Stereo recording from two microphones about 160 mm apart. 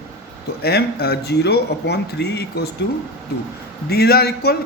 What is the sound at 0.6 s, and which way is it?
Speech, 90° left.